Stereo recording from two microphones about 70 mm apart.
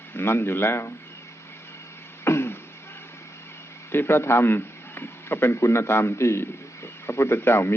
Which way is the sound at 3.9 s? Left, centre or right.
Left.